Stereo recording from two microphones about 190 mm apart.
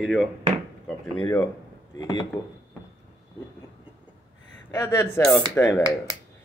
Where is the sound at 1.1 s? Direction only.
20° left (ahead or behind).